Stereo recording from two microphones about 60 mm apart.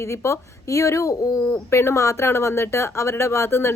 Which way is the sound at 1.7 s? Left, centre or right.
Left.